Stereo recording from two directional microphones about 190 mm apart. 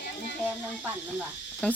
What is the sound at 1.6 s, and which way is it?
Speech, 5° left (ahead or behind).